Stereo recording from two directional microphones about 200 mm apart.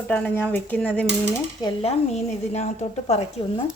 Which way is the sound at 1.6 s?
30° left (ahead or behind).